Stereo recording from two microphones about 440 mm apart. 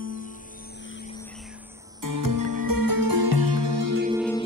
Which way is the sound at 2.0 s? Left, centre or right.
Right.